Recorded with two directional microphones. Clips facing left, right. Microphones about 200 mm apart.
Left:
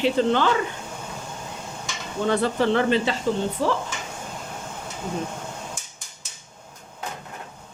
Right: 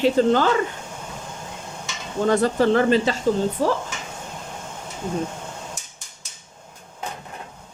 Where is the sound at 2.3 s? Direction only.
40° right (ahead or behind).